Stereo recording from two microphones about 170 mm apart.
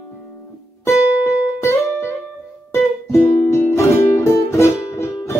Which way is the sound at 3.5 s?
15° left (ahead or behind).